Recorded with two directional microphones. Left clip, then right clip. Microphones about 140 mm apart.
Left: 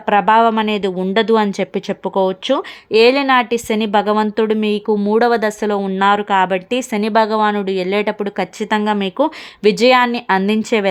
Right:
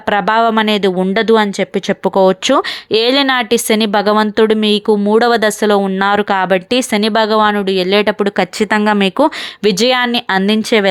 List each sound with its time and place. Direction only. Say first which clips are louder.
0.0 s speech: even; 25° right (ahead or behind)
1.4 s speech: right 3 dB; 10° right (ahead or behind)
1.9 s speech: right 7 dB; 30° right (ahead or behind)